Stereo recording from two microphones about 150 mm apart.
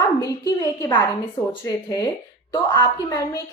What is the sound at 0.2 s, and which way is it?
A woman's voice, 25° left (ahead or behind).